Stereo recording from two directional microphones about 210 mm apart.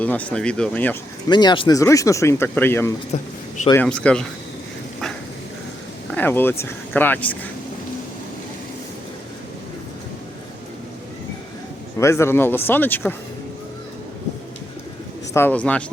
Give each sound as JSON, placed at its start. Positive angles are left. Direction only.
{"t": 0.0, "sound": "speech", "side_deg": 5}
{"t": 1.3, "sound": "speech", "side_deg": 20}
{"t": 3.1, "sound": "speech", "side_deg": 30}
{"t": 3.7, "sound": "speech", "side_deg": 5}
{"t": 6.1, "sound": "speech", "side_deg": 10}
{"t": 11.9, "sound": "speech", "side_deg": 15}
{"t": 15.3, "sound": "speech", "side_deg": 10}